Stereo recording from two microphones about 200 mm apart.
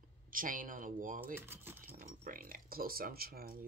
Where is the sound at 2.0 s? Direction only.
45° right (ahead or behind).